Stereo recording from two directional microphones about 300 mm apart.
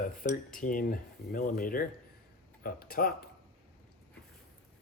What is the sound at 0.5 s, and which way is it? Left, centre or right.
Speech, left.